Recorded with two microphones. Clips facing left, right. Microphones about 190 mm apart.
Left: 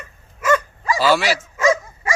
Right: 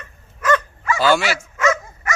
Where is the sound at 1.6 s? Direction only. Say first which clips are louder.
Left 2 dB; 30° left (ahead or behind).